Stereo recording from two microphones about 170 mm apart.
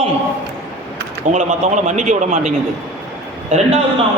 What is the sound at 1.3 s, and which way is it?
A man's voice, 45° right (ahead or behind).